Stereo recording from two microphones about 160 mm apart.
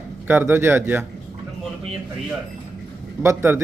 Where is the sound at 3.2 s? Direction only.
15° right (ahead or behind).